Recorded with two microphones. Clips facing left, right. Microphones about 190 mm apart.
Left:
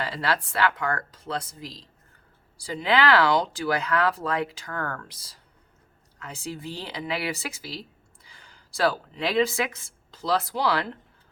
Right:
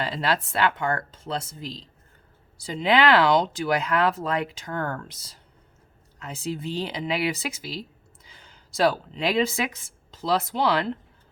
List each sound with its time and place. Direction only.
0.0 s speech: 25° right (ahead or behind)